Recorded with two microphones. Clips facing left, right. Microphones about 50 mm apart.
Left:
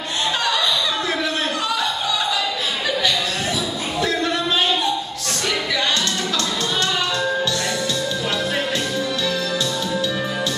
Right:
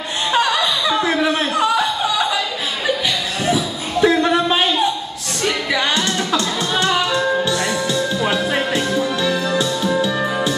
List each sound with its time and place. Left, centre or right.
0.3 s chuckle: right
3.5 s a sound: centre
6.3 s music: centre